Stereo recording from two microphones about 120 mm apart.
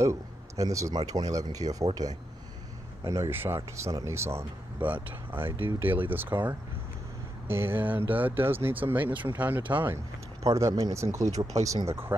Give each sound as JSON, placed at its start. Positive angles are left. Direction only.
{"t": 0.0, "sound": "speech", "side_deg": -25}
{"t": 10.4, "sound": "speech", "side_deg": -30}